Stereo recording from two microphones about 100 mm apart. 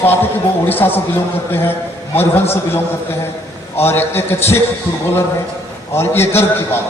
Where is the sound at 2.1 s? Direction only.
20° left (ahead or behind).